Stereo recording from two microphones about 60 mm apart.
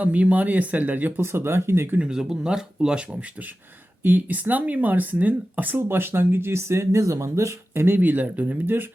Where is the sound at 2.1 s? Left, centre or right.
Centre; by 5.7 s right.